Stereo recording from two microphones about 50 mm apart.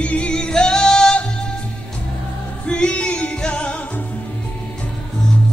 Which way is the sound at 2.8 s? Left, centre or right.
Left.